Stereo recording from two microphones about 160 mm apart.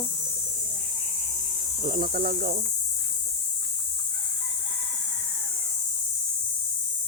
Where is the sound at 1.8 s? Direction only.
60° right (ahead or behind).